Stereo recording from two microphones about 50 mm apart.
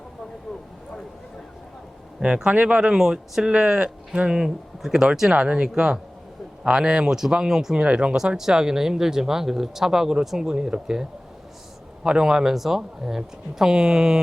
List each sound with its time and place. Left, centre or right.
2.2 s speech: centre
2.8 s speech: centre
7.9 s speech: right
8.1 s speech: centre
12.0 s speech: centre